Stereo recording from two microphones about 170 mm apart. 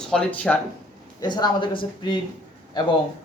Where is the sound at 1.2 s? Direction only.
25° left (ahead or behind).